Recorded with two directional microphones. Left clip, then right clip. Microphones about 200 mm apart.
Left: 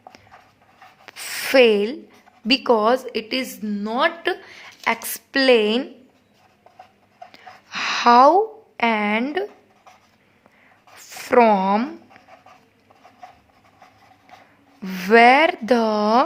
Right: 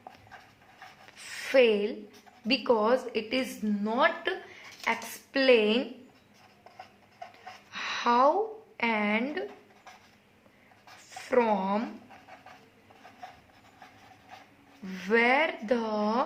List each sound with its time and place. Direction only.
1.1 s a sound: 55° left (ahead or behind)
2.5 s a woman's voice: 45° left (ahead or behind)
7.7 s a sound: 55° left (ahead or behind)
8.8 s a woman's voice: 50° left (ahead or behind)
11.2 s a woman's voice: 55° left (ahead or behind)
14.8 s a woman's voice: 55° left (ahead or behind)